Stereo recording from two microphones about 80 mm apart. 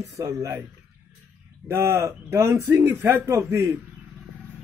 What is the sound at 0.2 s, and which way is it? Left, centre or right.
Speech, right.